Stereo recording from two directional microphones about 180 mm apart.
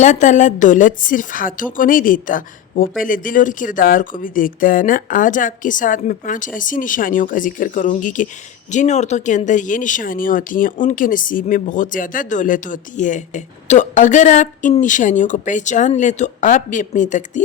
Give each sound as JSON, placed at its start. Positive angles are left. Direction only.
{"t": 0.0, "sound": "speech", "side_deg": 40}